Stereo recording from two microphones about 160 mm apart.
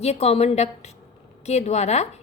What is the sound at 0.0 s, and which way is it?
A woman's voice, 40° left (ahead or behind).